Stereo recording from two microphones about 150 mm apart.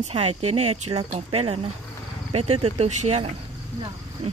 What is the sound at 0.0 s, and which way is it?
Speech, 45° right (ahead or behind).